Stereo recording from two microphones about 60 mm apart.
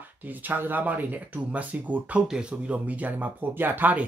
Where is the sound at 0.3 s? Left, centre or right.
Right.